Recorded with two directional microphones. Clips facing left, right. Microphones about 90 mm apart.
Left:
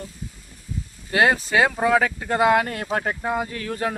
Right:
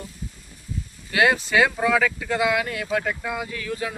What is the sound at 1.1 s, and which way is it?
Speech, 35° left (ahead or behind).